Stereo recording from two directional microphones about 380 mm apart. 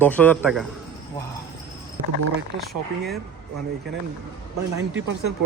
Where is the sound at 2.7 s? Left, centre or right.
Centre.